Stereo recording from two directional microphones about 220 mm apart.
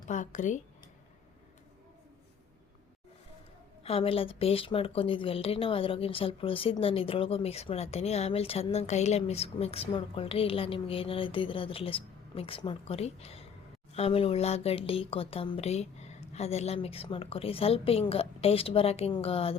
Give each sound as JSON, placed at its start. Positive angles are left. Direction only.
{"t": 0.1, "sound": "speech", "side_deg": 35}
{"t": 3.8, "sound": "speech", "side_deg": 25}